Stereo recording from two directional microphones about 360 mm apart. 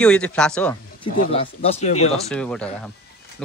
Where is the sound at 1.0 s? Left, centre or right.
Centre.